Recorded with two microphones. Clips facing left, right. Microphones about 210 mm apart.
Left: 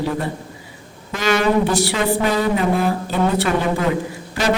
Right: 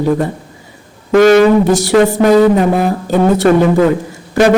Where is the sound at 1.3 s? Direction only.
45° right (ahead or behind).